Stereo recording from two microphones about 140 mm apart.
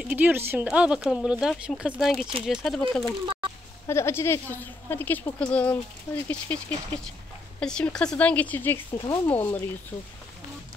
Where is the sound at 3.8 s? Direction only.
20° left (ahead or behind).